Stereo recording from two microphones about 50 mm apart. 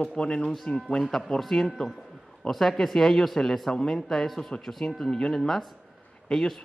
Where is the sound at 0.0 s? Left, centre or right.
Centre.